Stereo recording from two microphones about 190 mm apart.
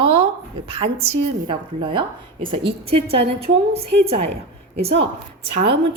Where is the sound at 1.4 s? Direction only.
25° right (ahead or behind).